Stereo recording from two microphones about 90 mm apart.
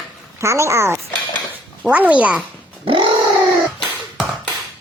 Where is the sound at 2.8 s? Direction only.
80° right.